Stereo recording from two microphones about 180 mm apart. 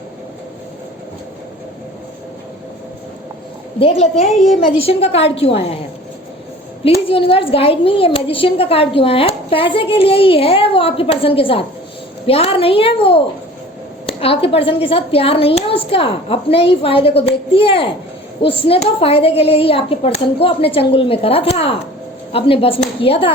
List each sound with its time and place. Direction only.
3.8 s a woman's voice: 35° left (ahead or behind)
4.4 s a woman's voice: centre (ahead or behind)
4.8 s a woman's voice: 35° left (ahead or behind)
6.8 s a woman's voice: 30° left (ahead or behind)